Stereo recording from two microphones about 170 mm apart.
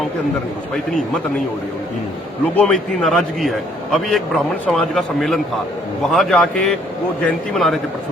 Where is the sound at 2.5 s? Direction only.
5° left (ahead or behind).